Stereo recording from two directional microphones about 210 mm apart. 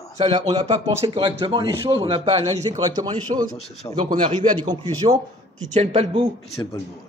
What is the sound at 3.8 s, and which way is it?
Speech, 15° left (ahead or behind).